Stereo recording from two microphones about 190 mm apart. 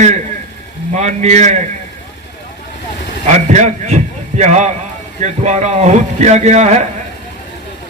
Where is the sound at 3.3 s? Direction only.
40° right (ahead or behind).